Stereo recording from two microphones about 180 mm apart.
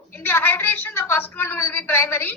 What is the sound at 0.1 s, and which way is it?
A woman's voice, 10° left (ahead or behind).